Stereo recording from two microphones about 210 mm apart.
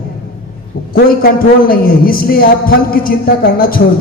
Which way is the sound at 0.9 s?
45° left (ahead or behind).